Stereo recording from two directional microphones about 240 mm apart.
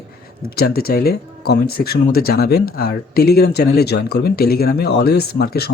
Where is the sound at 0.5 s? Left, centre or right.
Left.